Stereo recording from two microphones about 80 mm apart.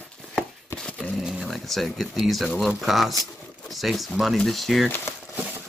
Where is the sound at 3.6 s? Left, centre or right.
Centre.